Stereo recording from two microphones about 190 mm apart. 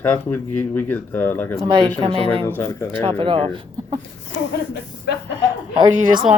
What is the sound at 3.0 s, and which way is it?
Speech, 25° right (ahead or behind).